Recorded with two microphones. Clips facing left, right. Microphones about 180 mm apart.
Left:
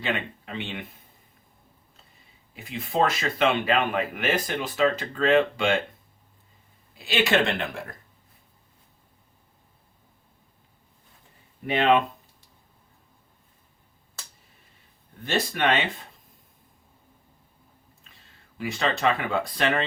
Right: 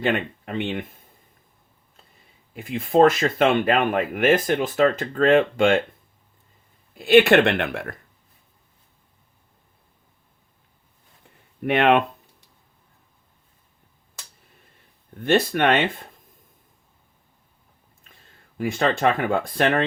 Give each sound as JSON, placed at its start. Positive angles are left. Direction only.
{"t": 0.0, "sound": "speech", "side_deg": -50}
{"t": 2.6, "sound": "speech", "side_deg": -50}
{"t": 6.9, "sound": "speech", "side_deg": -55}
{"t": 11.6, "sound": "speech", "side_deg": -65}
{"t": 15.2, "sound": "speech", "side_deg": -55}
{"t": 18.1, "sound": "speech", "side_deg": -50}